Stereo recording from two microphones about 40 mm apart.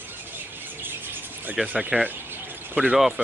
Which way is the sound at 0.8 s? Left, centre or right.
Right.